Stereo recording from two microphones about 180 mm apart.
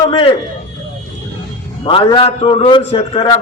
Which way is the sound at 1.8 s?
25° left (ahead or behind).